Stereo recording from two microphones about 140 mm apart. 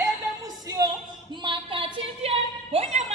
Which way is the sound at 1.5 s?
40° right (ahead or behind).